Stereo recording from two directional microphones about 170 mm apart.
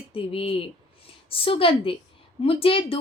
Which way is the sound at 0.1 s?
35° left (ahead or behind).